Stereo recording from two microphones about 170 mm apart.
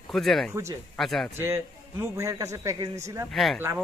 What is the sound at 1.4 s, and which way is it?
A man's voice, 15° right (ahead or behind).